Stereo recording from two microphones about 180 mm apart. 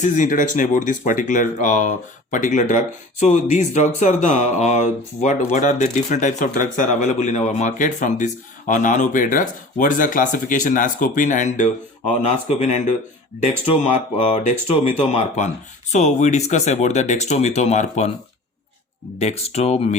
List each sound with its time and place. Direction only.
0.0 s speech: 45° left (ahead or behind)
14.2 s speech: 40° left (ahead or behind)
19.2 s speech: 35° left (ahead or behind)